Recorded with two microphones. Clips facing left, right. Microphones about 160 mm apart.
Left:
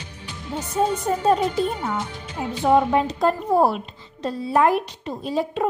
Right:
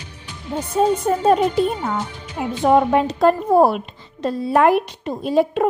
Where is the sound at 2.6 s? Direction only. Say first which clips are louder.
Right 3 dB; 55° right (ahead or behind).